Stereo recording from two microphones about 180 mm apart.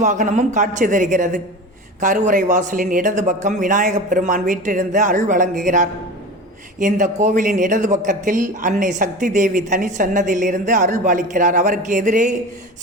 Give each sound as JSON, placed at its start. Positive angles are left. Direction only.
{"t": 0.0, "sound": "speech", "side_deg": -40}